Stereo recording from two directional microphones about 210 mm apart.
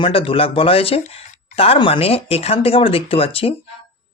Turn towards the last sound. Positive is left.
turn(degrees=25)  # may be behind; listen again after turning